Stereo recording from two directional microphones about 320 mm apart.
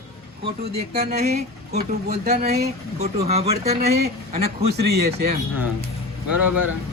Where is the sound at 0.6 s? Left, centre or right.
Right.